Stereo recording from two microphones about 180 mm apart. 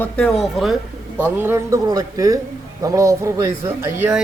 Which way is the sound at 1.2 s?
15° right (ahead or behind).